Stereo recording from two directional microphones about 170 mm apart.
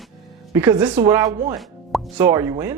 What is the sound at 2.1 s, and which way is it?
Speech, 15° right (ahead or behind).